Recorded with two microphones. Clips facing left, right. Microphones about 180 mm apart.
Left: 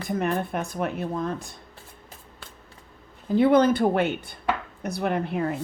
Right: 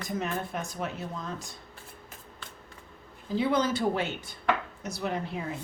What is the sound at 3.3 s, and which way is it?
A woman's voice, 60° left (ahead or behind).